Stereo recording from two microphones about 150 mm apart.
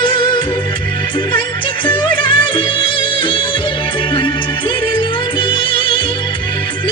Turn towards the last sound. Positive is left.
turn(degrees=35)  # may be behind; listen again after turning